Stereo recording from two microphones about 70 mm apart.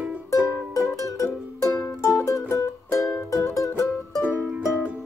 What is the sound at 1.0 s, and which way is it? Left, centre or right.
Music, left.